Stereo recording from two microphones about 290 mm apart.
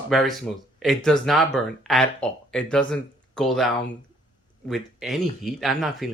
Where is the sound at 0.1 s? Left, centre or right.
Centre.